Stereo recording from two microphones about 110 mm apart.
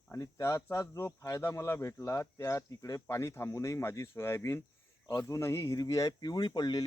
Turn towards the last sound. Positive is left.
turn(degrees=40)  # may be behind; listen again after turning